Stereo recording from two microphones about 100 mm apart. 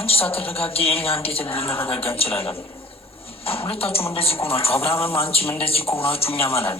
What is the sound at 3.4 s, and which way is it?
A woman's voice, 70° left (ahead or behind).